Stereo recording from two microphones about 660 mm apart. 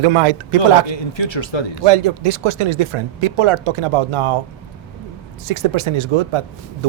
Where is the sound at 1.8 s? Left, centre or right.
Right.